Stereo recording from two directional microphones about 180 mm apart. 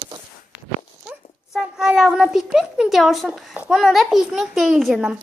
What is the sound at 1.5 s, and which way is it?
A child's voice, 5° right (ahead or behind).